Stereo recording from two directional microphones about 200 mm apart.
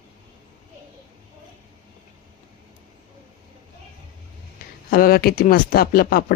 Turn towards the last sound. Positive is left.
turn(degrees=45)  # may be behind; listen again after turning